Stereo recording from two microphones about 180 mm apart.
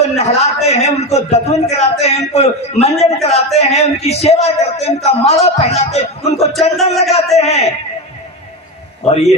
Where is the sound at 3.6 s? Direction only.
35° left (ahead or behind).